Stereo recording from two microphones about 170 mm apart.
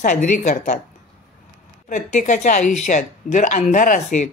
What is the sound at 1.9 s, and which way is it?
Speech, 45° left (ahead or behind).